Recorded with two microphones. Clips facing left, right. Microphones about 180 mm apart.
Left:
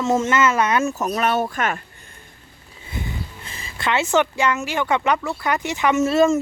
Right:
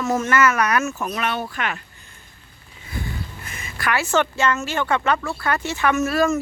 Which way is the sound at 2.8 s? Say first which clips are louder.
Even; 25° left (ahead or behind).